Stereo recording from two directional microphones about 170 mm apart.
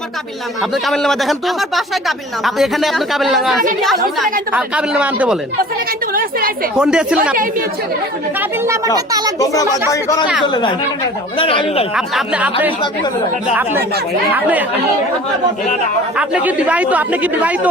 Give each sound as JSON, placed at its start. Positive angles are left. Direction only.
{"t": 0.7, "sound": "speech", "side_deg": 0}
{"t": 6.7, "sound": "speech", "side_deg": -5}
{"t": 8.4, "sound": "a child's voice", "side_deg": -15}
{"t": 9.4, "sound": "speech", "side_deg": 20}
{"t": 11.9, "sound": "speech", "side_deg": -5}
{"t": 16.1, "sound": "speech", "side_deg": -10}